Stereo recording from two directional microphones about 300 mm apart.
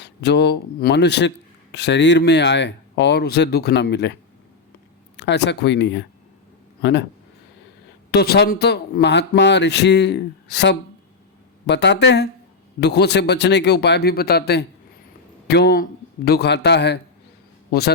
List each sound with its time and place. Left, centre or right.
0.0 s speech: left
8.1 s a man's voice: left